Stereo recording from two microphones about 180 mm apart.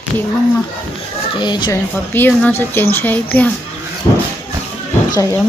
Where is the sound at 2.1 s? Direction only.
10° left (ahead or behind).